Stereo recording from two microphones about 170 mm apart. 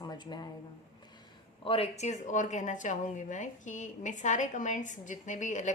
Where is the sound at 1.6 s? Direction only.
35° left (ahead or behind).